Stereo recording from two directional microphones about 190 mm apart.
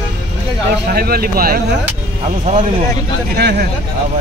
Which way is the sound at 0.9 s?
55° right (ahead or behind).